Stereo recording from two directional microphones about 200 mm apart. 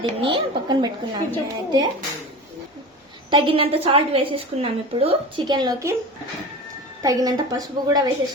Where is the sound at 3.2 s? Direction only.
25° right (ahead or behind).